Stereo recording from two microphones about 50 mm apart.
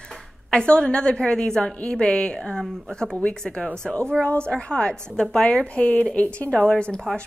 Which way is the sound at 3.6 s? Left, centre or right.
Left.